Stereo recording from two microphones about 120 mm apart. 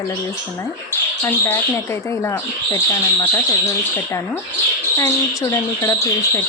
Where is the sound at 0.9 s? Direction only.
20° left (ahead or behind).